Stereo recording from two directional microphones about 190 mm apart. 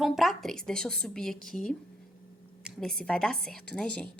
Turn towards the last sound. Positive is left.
turn(degrees=5)  # may be behind; listen again after turning